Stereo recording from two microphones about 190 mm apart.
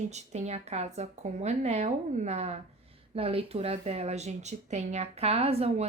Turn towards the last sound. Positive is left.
turn(degrees=-30)  # may be behind; listen again after turning